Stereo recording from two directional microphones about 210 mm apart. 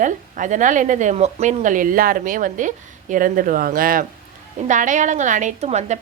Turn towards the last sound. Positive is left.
turn(degrees=-30)  # may be behind; listen again after turning